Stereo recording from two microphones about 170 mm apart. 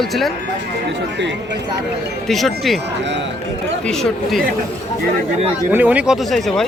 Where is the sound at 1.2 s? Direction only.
90° right.